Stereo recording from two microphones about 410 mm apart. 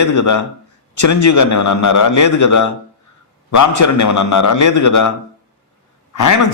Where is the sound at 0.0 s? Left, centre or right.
Left.